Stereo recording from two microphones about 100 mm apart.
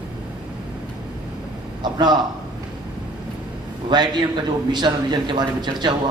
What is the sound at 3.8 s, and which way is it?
A man's voice, 45° right (ahead or behind).